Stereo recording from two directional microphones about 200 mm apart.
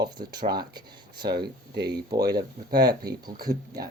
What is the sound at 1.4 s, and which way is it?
Speech, 55° right (ahead or behind).